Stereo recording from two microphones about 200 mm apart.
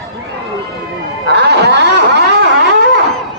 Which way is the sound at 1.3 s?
60° right (ahead or behind).